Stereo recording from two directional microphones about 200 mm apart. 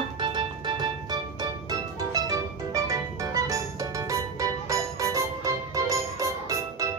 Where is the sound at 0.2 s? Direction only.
25° right (ahead or behind).